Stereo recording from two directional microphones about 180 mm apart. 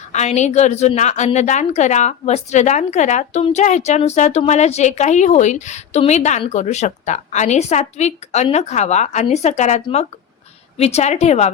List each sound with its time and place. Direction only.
0.1 s a woman's voice: 40° left (ahead or behind)